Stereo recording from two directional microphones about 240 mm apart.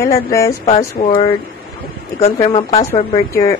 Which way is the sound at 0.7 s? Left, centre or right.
Left.